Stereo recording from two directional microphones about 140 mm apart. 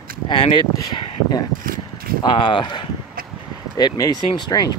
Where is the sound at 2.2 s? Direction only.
35° left (ahead or behind).